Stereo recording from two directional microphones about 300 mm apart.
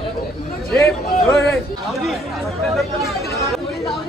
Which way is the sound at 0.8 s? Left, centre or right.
Centre.